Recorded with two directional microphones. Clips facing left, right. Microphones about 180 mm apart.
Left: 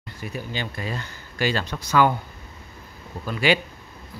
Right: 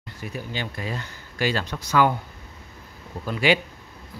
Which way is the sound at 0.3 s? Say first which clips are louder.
Left 1 dB; 5° right (ahead or behind).